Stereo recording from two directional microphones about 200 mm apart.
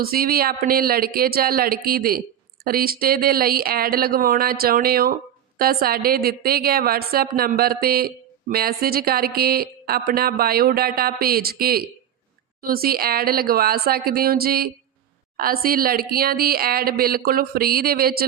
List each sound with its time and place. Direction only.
0.0 s a woman's voice: 50° right (ahead or behind)